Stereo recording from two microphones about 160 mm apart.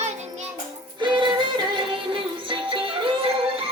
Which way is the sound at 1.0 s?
30° right (ahead or behind).